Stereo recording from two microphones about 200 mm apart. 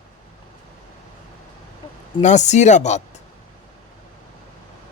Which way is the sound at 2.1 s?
35° left (ahead or behind).